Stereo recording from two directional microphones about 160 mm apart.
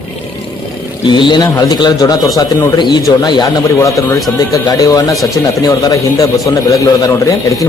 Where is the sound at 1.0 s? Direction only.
30° left (ahead or behind).